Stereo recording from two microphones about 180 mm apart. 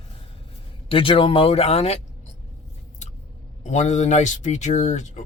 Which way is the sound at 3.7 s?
40° left (ahead or behind).